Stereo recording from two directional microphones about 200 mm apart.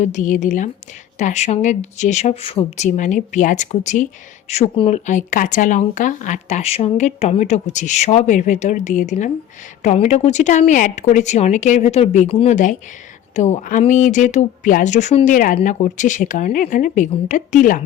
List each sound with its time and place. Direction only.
0.0 s a woman's voice: 40° left (ahead or behind)